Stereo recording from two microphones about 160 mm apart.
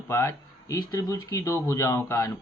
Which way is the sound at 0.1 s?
20° left (ahead or behind).